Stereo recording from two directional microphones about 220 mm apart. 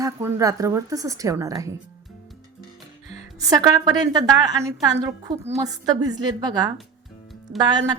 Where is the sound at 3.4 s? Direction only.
15° right (ahead or behind).